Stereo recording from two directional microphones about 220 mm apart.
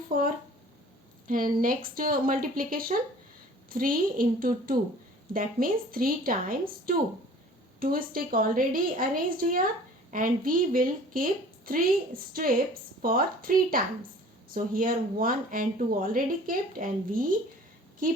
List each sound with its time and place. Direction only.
0.1 s a woman's voice: 40° right (ahead or behind)